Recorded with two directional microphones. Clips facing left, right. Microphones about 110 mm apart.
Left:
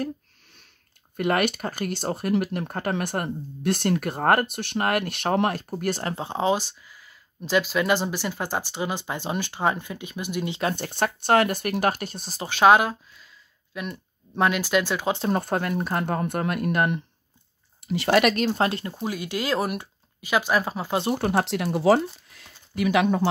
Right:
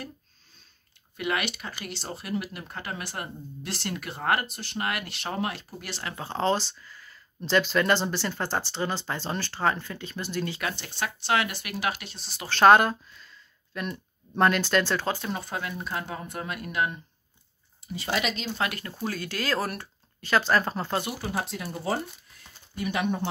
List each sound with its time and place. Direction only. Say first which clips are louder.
1.1 s speech: left 7 dB; 45° left (ahead or behind)
6.1 s speech: right 1 dB; 15° left (ahead or behind)
10.6 s speech: left 7 dB; 45° left (ahead or behind)
12.4 s speech: even; 5° left (ahead or behind)
15.3 s speech: left 8 dB; 55° left (ahead or behind)
17.8 s speech: left 9 dB; 75° left (ahead or behind); by 18.6 s 60° left (ahead or behind)
18.6 s speech: left 6 dB; 25° left (ahead or behind); by 21.0 s 10° left (ahead or behind)
21.2 s speech: left 8 dB; 75° left (ahead or behind)